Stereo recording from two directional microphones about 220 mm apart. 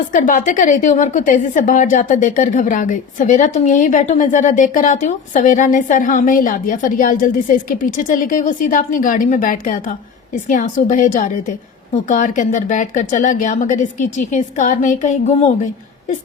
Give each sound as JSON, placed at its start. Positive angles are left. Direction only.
{"t": 0.1, "sound": "a woman's voice", "side_deg": 35}